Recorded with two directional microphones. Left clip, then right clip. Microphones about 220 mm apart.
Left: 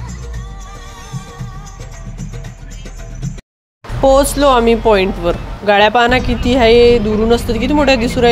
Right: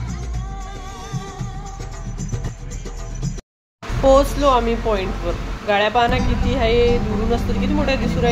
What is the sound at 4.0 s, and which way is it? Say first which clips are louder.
Speech: left 4 dB; 35° left (ahead or behind).